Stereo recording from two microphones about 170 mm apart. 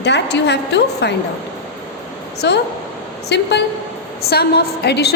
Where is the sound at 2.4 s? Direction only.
85° left.